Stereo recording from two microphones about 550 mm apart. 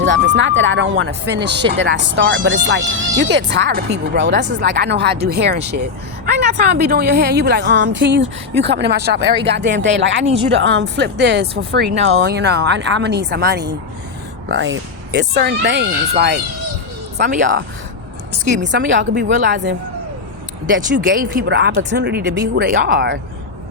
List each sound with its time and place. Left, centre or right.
0.0 s a woman's voice: centre
18.6 s speech: centre
20.9 s a woman's voice: centre